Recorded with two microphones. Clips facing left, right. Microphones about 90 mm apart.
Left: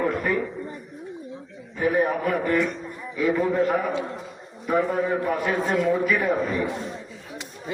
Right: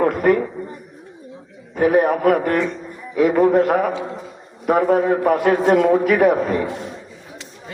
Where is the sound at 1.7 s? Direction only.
70° right (ahead or behind).